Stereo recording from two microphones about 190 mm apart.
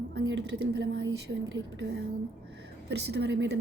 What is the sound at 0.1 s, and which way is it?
A woman's voice, 70° right (ahead or behind).